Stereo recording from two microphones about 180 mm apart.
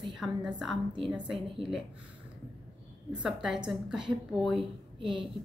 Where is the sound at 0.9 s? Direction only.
25° right (ahead or behind).